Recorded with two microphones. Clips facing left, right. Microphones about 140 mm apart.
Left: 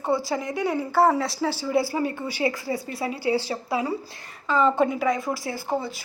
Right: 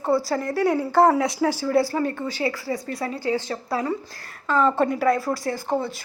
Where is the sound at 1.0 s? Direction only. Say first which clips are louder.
Right 3 dB; 10° right (ahead or behind).